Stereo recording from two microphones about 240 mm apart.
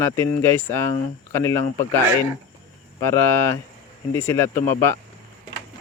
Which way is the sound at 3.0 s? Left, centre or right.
Centre.